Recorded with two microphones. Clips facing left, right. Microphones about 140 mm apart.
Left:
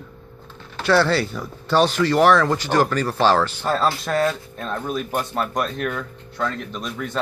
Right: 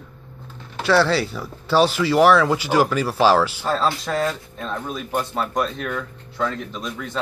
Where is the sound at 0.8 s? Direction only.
Centre (ahead or behind).